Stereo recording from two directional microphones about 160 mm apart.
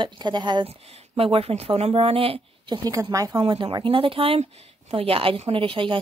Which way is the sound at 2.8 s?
20° right (ahead or behind).